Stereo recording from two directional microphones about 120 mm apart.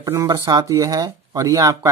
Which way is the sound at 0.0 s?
30° right (ahead or behind).